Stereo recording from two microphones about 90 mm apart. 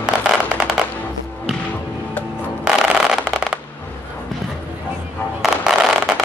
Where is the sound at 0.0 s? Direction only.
10° right (ahead or behind).